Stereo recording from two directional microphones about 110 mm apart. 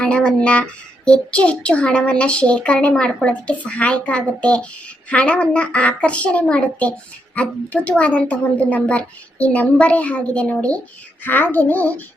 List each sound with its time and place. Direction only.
0.0 s a woman's voice: 10° left (ahead or behind)